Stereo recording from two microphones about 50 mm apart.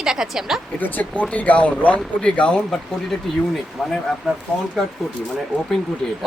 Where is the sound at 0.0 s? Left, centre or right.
Centre.